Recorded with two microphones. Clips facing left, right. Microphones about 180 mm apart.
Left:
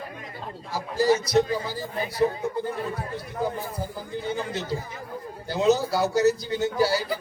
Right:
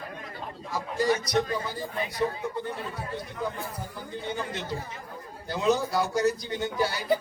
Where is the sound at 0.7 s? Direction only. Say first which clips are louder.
Left 4 dB; 25° left (ahead or behind).